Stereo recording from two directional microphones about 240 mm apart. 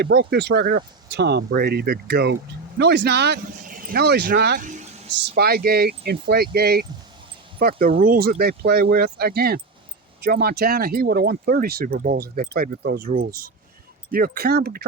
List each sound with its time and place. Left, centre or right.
0.0 s speech: right
5.4 s speech: right